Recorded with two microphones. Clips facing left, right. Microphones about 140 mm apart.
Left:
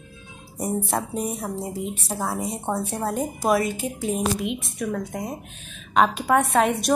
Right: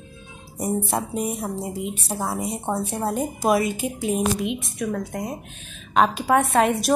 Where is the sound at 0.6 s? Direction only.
5° right (ahead or behind).